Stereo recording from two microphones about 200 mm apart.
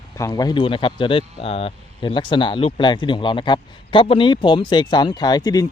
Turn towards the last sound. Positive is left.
turn(degrees=20)  # may be behind; listen again after turning